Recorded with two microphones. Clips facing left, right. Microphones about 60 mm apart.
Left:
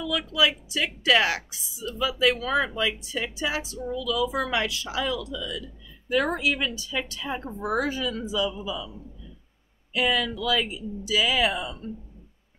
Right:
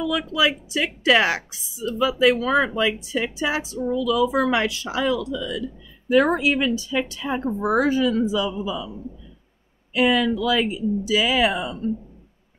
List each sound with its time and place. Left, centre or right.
0.0 s speech: right
9.9 s speech: right